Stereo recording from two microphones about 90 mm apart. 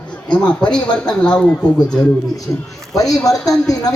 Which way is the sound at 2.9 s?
40° left (ahead or behind).